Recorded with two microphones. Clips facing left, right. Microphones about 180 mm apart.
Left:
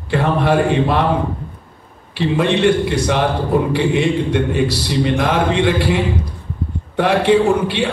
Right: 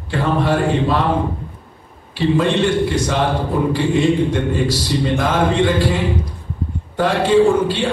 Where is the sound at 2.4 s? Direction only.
65° left (ahead or behind).